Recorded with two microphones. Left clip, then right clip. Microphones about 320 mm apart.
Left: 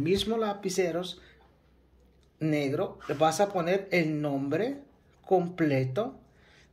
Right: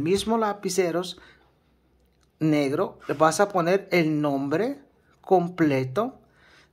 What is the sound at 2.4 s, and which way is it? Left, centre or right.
Speech, centre.